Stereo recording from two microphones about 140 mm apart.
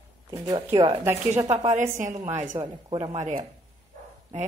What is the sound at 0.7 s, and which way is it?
Speech, 30° right (ahead or behind).